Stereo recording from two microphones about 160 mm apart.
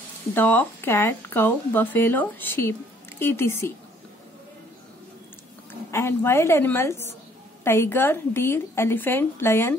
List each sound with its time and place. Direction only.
0.3 s speech: 10° left (ahead or behind)
5.9 s speech: 15° left (ahead or behind)